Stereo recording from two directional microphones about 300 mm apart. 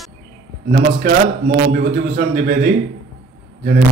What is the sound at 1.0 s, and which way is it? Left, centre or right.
Speech, right.